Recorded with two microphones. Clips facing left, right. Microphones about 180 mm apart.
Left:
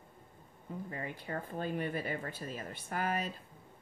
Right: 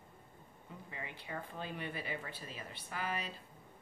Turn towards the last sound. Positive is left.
turn(degrees=45)  # may be behind; listen again after turning